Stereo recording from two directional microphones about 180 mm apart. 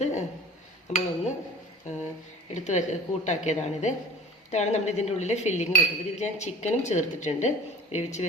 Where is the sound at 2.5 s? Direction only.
40° left (ahead or behind).